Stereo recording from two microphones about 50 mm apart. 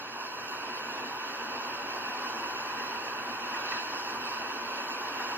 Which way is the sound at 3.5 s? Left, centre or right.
Right.